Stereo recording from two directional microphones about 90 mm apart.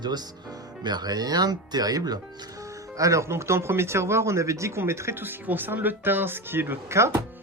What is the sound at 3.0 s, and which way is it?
Speech, 35° right (ahead or behind).